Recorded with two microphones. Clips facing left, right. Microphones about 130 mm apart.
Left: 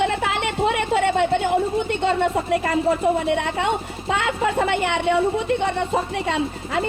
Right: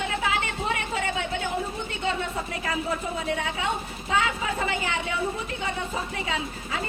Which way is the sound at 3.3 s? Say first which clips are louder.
Left 7 dB; 85° left.